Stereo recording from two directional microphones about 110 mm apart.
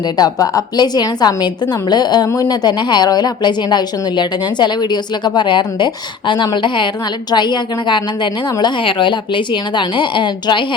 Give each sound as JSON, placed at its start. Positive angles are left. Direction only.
{"t": 0.2, "sound": "a woman's voice", "side_deg": 30}